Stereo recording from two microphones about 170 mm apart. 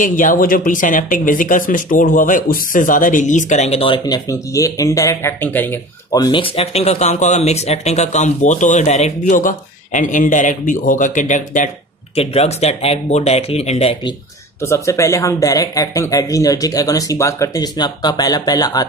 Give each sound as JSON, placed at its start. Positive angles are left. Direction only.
{"t": 0.0, "sound": "speech", "side_deg": 50}
{"t": 6.1, "sound": "speech", "side_deg": 25}
{"t": 12.2, "sound": "speech", "side_deg": 35}
{"t": 14.6, "sound": "speech", "side_deg": 15}